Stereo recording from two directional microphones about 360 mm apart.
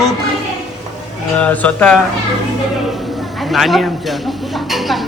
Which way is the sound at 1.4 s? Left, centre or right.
Centre.